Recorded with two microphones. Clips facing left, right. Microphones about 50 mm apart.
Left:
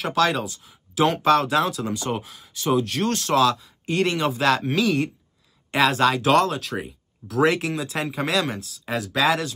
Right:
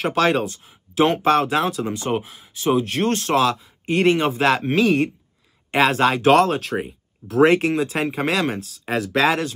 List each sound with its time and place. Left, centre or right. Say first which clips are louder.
0.0 s speech: right 3 dB; right